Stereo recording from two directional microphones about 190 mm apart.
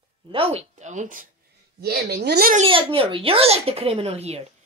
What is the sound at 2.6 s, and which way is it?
Speech, 30° right (ahead or behind).